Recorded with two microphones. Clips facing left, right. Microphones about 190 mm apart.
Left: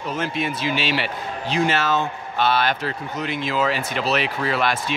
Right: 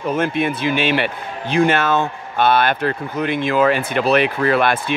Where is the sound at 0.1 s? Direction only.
55° right (ahead or behind).